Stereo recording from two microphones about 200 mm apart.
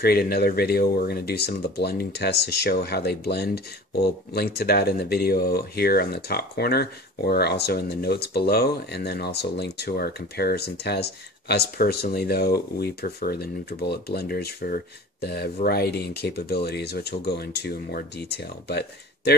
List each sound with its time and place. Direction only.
0.0 s speech: 50° left (ahead or behind)